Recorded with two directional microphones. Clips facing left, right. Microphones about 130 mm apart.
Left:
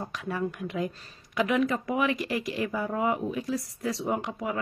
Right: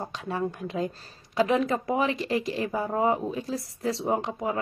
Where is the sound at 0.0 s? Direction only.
30° right (ahead or behind).